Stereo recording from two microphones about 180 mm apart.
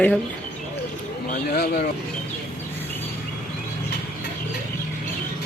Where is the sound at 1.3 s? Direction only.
60° left (ahead or behind).